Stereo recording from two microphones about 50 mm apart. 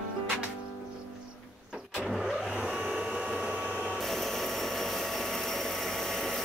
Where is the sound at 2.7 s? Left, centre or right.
Centre.